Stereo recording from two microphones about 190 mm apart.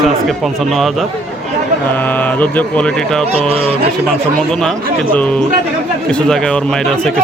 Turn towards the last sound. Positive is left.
turn(degrees=5)  # may be behind; listen again after turning